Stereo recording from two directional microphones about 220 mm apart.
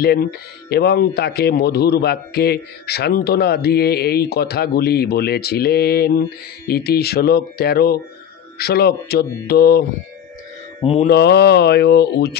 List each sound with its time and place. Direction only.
0.7 s a man's voice: 45° left (ahead or behind)
10.8 s mantra: 25° left (ahead or behind)
11.1 s a man's voice: 50° left (ahead or behind)